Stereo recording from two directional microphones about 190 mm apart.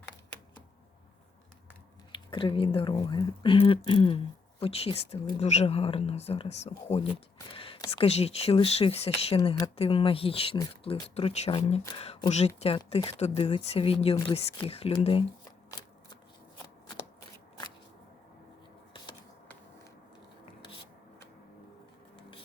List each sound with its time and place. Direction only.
2.1 s speech: 25° left (ahead or behind)